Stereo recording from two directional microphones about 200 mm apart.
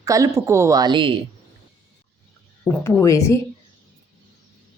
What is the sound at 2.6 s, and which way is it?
Speech, 10° left (ahead or behind).